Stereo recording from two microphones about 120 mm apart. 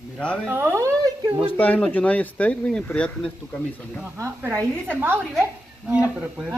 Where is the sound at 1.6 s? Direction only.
15° left (ahead or behind).